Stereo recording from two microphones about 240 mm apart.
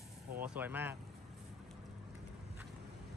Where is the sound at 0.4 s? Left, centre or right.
Centre.